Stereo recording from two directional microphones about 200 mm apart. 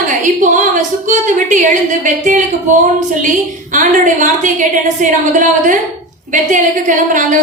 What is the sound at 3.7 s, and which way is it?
A woman's voice, 40° right (ahead or behind).